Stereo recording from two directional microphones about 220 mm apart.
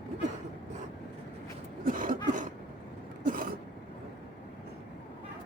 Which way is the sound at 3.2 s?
40° right (ahead or behind).